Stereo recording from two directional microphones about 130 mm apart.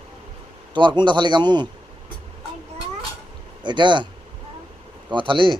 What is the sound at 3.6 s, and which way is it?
Speech, 35° right (ahead or behind).